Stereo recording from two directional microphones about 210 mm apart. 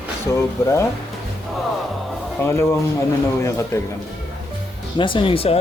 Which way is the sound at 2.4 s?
10° left (ahead or behind).